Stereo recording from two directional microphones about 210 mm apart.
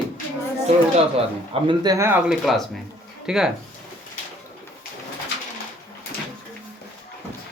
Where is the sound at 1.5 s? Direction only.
25° right (ahead or behind); by 3.5 s 5° right (ahead or behind).